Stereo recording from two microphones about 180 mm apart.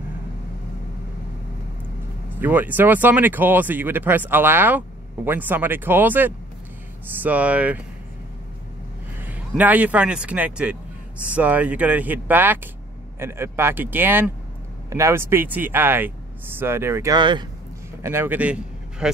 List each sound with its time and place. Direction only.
2.3 s speech: 10° right (ahead or behind)
9.2 s speech: 10° right (ahead or behind); by 17.5 s 25° right (ahead or behind)
18.0 s a man's voice: 15° right (ahead or behind)